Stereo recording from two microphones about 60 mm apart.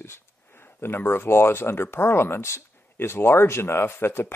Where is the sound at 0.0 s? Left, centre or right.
Left.